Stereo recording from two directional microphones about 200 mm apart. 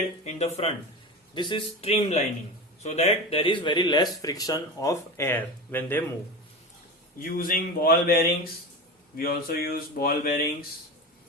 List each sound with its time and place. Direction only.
0.3 s speech: 35° left (ahead or behind); by 6.0 s 10° left (ahead or behind)
7.2 s speech: 45° left (ahead or behind)